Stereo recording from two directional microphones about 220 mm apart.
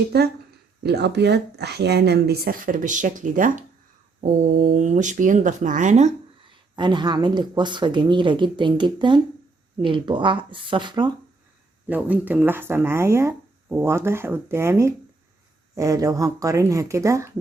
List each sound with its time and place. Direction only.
0.1 s speech: 45° right (ahead or behind)
6.5 s speech: 20° right (ahead or behind)
11.9 s speech: 5° right (ahead or behind)